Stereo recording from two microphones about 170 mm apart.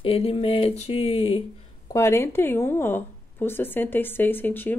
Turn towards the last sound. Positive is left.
turn(degrees=10)  # may be behind; listen again after turning